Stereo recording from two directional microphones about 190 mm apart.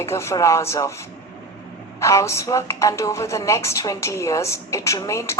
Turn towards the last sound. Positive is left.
turn(degrees=15)  # may be behind; listen again after turning